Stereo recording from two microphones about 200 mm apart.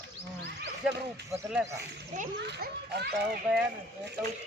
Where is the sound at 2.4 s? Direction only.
55° right (ahead or behind).